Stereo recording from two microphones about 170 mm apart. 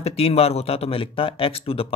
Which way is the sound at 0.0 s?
35° left (ahead or behind).